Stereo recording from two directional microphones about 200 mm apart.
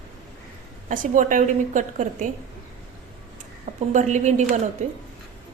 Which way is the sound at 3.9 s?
35° right (ahead or behind).